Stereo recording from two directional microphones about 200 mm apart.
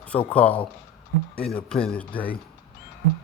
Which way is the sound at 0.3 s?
5° left (ahead or behind).